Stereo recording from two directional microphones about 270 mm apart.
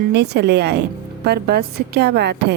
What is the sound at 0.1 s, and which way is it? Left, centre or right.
Speech, right.